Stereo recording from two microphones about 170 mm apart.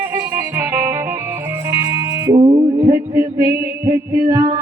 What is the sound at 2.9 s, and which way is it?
Music, 15° right (ahead or behind).